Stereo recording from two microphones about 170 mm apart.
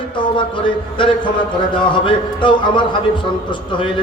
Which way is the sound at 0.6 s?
30° left (ahead or behind).